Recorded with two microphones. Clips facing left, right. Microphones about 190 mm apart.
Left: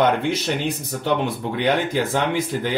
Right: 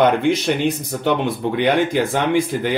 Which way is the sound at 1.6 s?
15° right (ahead or behind).